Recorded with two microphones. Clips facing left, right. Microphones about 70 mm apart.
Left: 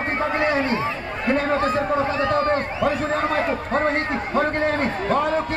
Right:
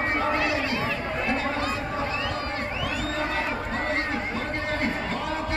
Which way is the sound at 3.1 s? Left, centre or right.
Left.